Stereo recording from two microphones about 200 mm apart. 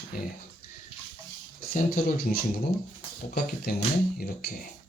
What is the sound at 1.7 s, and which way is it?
Speech, 45° left (ahead or behind).